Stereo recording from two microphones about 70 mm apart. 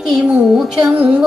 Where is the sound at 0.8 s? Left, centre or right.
Right.